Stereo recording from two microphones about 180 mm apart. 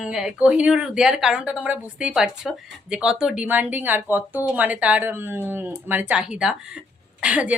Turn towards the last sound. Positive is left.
turn(degrees=-5)  # may be behind; listen again after turning